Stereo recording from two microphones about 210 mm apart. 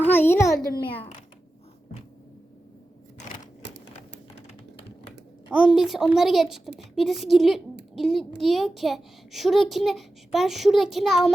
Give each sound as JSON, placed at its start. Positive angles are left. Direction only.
{"t": 0.0, "sound": "a child's voice", "side_deg": 10}
{"t": 0.8, "sound": "a child's voice", "side_deg": 25}
{"t": 3.6, "sound": "typewriter", "side_deg": -55}
{"t": 5.5, "sound": "a child's voice", "side_deg": -5}